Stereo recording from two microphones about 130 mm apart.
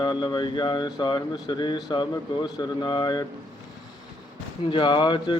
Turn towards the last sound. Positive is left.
turn(degrees=35)  # may be behind; listen again after turning